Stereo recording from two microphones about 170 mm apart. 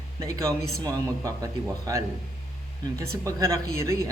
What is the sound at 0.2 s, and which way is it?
A man's voice, 20° right (ahead or behind).